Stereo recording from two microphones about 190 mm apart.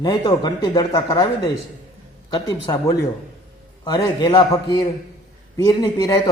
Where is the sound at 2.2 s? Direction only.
20° left (ahead or behind).